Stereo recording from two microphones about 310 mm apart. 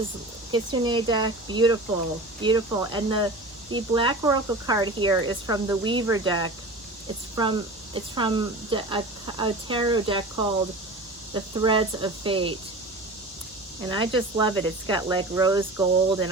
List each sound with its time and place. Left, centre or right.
0.5 s speech: centre
7.9 s speech: centre
11.3 s speech: centre
13.8 s speech: centre